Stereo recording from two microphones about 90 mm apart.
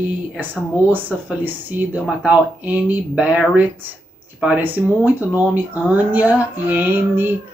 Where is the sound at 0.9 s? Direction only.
20° right (ahead or behind).